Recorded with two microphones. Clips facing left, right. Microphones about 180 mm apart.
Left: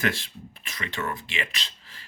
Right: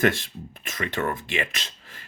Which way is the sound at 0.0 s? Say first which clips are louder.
Right 6 dB; 45° right (ahead or behind).